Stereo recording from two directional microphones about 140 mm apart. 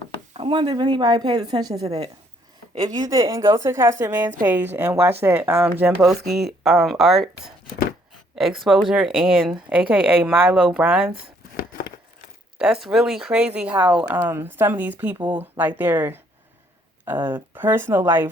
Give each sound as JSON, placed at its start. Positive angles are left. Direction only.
{"t": 0.3, "sound": "knock", "side_deg": -45}
{"t": 0.6, "sound": "a woman's voice", "side_deg": -30}
{"t": 3.0, "sound": "a woman's voice", "side_deg": -25}
{"t": 6.0, "sound": "speech", "side_deg": 0}
{"t": 12.5, "sound": "speech", "side_deg": -5}